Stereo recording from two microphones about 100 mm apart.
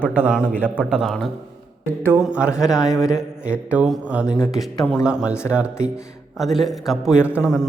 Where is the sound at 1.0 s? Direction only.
5° left (ahead or behind).